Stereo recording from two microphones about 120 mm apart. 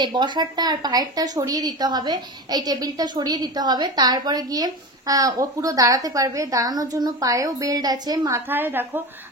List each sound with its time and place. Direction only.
0.0 s a woman's voice: 40° right (ahead or behind)
8.5 s a woman's voice: 15° right (ahead or behind)